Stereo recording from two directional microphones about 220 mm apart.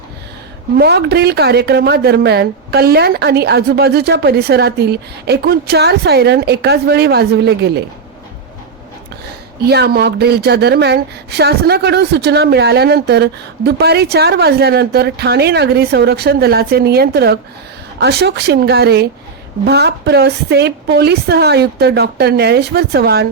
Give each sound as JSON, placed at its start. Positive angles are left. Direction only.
{"t": 0.8, "sound": "a woman's voice", "side_deg": -50}
{"t": 9.6, "sound": "a woman's voice", "side_deg": -45}